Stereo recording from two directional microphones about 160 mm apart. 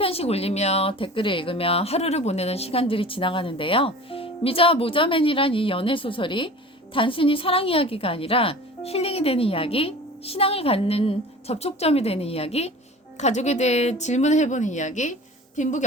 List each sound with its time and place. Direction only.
0.0 s a woman's voice: 40° left (ahead or behind)